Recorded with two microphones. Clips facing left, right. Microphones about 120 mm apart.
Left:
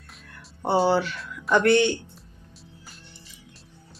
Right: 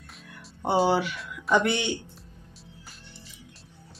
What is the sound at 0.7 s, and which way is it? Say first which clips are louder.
Speech: left 2 dB; 10° right (ahead or behind).